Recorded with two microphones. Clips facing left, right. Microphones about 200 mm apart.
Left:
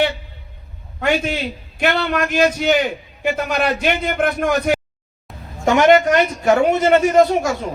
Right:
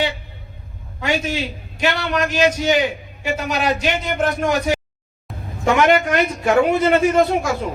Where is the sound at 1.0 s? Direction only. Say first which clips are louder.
Left 2 dB; 55° left (ahead or behind).